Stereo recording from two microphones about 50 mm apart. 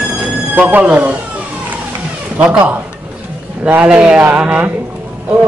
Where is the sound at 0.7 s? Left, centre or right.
Right.